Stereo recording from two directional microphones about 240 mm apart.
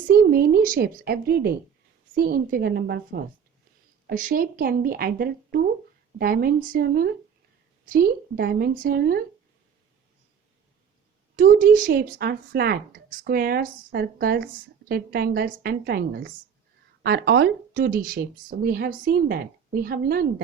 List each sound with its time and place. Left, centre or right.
0.1 s speech: right
11.3 s speech: right